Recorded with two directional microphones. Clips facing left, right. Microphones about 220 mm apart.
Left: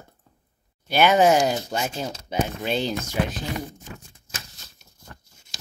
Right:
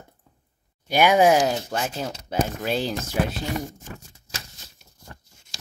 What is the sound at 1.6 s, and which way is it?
Speech, 10° left (ahead or behind).